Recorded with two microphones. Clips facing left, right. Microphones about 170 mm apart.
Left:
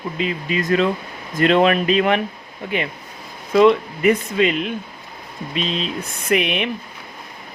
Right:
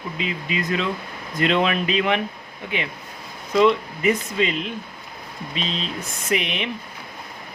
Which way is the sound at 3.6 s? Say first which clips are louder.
Left 4 dB; 55° left (ahead or behind).